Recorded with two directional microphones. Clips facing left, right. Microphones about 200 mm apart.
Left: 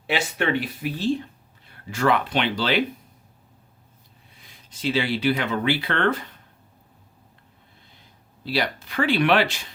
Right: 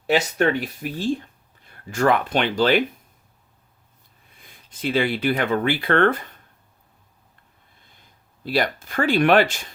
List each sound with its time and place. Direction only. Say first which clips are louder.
0.1 s speech: right 4 dB; 45° right (ahead or behind)
4.4 s speech: even; 55° right (ahead or behind)
8.4 s speech: right 3 dB; 50° right (ahead or behind)